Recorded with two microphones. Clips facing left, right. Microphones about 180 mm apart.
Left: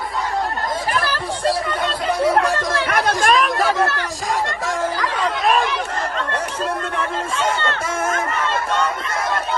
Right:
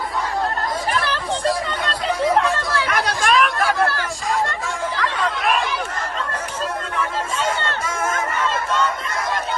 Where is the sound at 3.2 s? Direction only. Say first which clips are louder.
Even; 40° left (ahead or behind).